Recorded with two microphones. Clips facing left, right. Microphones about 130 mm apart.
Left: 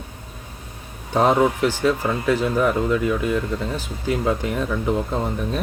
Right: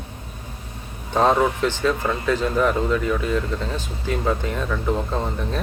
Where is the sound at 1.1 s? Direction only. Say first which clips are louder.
Left 1 dB; 10° left (ahead or behind).